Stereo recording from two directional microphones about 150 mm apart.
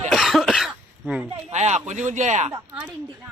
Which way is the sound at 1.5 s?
50° right (ahead or behind).